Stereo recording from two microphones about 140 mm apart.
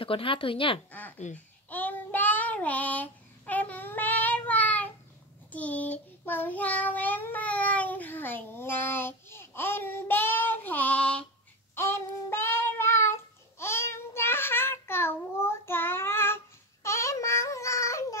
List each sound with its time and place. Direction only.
0.0 s a woman's voice: 40° left (ahead or behind)
0.9 s speech: 10° left (ahead or behind)
1.7 s child singing: 10° left (ahead or behind)
16.8 s a sound: 20° left (ahead or behind)